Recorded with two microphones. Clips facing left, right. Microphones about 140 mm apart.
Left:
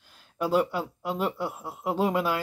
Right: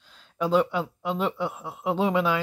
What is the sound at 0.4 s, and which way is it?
Speech, 5° left (ahead or behind).